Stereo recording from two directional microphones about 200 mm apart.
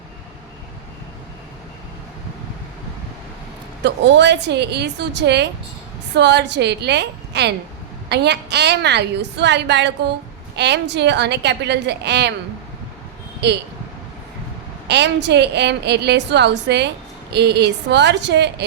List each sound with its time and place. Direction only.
3.8 s a woman's voice: 60° right (ahead or behind)
14.8 s a woman's voice: 60° right (ahead or behind)